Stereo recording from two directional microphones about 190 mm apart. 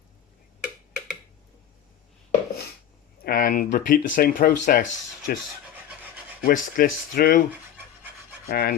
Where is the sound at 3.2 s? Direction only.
50° left (ahead or behind).